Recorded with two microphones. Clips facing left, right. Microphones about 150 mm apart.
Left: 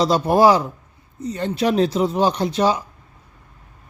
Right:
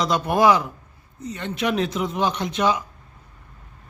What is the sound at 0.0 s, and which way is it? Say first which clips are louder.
A man's voice: left 4 dB; 35° left (ahead or behind).